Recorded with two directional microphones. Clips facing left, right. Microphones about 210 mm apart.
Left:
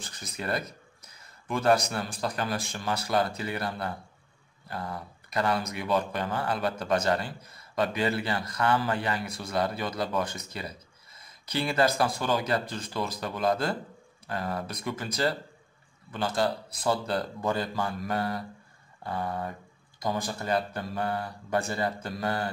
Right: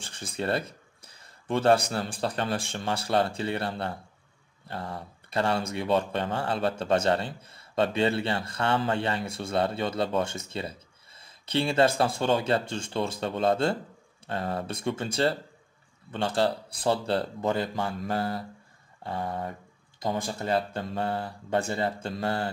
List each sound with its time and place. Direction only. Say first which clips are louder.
0.0 s speech: right 4 dB; 30° right (ahead or behind)